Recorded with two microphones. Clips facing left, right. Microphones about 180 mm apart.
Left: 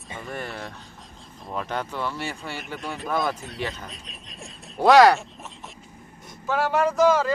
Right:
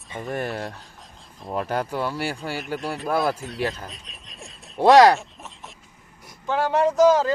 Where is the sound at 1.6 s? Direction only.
10° right (ahead or behind).